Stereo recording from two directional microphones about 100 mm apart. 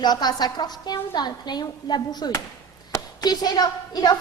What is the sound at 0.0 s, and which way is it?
A woman's voice, 45° left (ahead or behind).